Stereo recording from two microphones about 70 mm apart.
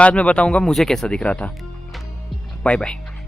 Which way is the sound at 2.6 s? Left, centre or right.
Centre.